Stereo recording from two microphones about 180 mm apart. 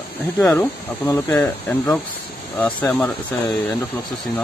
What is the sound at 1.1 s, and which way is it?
Speech, 15° left (ahead or behind).